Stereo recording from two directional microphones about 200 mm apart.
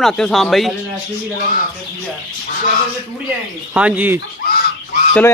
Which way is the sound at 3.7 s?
5° right (ahead or behind).